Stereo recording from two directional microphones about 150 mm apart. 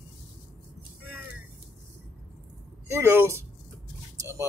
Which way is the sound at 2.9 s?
15° right (ahead or behind).